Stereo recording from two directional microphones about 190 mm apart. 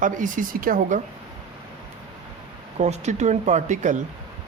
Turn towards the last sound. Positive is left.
turn(degrees=-40)  # may be behind; listen again after turning